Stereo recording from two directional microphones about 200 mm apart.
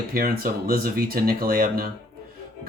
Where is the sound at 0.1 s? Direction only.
50° right (ahead or behind).